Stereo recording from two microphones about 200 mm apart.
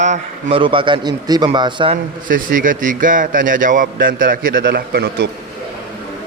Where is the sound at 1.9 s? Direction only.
45° right (ahead or behind).